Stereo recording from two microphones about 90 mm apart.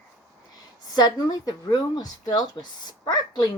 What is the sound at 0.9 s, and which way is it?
A woman's voice, 45° left (ahead or behind).